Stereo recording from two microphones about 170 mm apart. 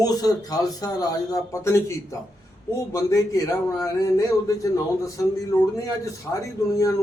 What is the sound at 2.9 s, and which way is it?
A man's voice, 20° left (ahead or behind).